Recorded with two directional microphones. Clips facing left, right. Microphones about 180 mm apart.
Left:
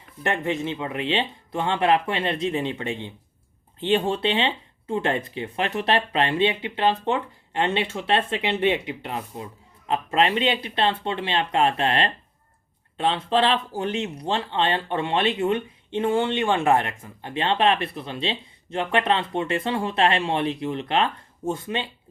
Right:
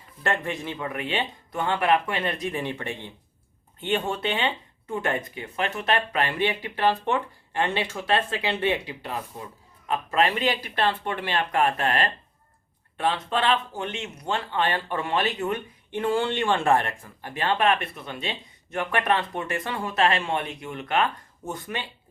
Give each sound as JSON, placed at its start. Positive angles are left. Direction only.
{"t": 0.2, "sound": "speech", "side_deg": 20}